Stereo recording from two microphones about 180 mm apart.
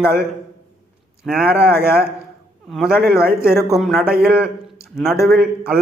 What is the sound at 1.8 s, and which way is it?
Speech, 60° right (ahead or behind).